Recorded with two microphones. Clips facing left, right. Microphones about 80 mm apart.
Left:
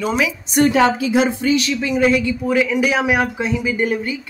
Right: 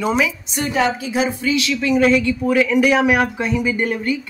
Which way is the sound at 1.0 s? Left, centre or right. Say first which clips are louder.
Left 4 dB; left.